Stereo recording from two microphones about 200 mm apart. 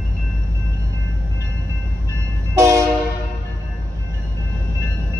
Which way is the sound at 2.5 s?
15° right (ahead or behind).